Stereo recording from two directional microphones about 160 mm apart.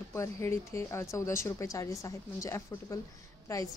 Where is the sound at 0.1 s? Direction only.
15° left (ahead or behind).